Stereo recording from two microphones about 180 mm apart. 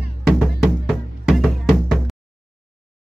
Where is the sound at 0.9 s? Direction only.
Centre (ahead or behind).